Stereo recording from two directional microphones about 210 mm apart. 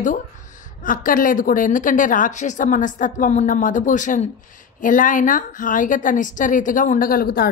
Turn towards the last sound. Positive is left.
turn(degrees=45)  # may be behind; listen again after turning